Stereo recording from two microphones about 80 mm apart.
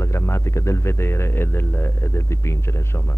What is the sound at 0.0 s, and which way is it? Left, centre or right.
Speech, left.